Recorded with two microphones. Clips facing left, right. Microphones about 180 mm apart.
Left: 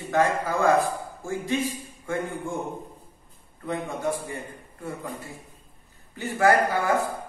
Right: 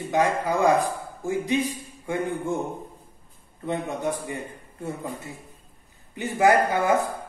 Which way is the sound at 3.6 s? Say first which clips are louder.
Right 1 dB; 20° right (ahead or behind).